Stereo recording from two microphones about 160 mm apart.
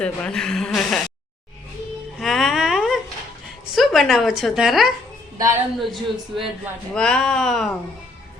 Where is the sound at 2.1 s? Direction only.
Centre (ahead or behind).